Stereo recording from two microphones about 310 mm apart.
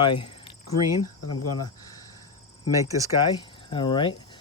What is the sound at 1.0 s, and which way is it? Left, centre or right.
Speech, left.